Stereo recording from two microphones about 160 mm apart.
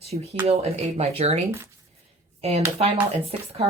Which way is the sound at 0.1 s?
40° right (ahead or behind).